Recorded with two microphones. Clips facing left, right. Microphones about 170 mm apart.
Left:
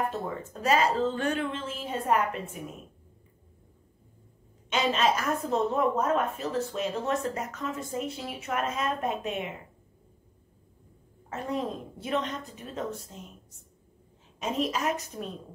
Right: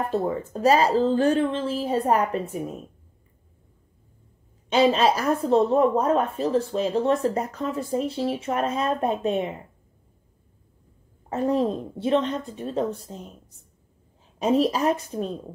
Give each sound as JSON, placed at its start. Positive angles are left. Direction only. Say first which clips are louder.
{"t": 0.1, "sound": "speech", "louder": "right 9 dB", "side_deg": -35}
{"t": 4.6, "sound": "speech", "louder": "right 7 dB", "side_deg": -35}
{"t": 11.2, "sound": "speech", "louder": "right 9 dB", "side_deg": -35}
{"t": 14.4, "sound": "speech", "louder": "right 8 dB", "side_deg": -35}